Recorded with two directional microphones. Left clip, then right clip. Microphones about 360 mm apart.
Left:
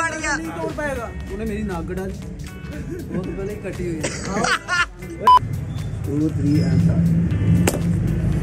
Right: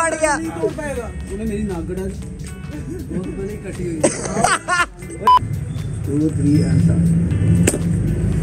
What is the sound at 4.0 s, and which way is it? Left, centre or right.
Speech, centre.